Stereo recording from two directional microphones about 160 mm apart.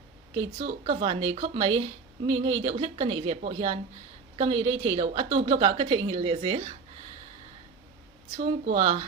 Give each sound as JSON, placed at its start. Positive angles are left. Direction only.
{"t": 0.3, "sound": "speech", "side_deg": -40}
{"t": 8.4, "sound": "speech", "side_deg": -40}